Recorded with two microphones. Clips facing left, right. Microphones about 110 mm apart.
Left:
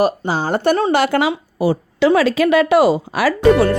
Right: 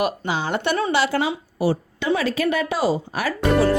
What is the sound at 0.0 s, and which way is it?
Speech, 40° left (ahead or behind).